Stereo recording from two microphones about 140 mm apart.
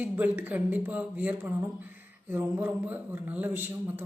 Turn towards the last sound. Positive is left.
turn(degrees=-15)  # may be behind; listen again after turning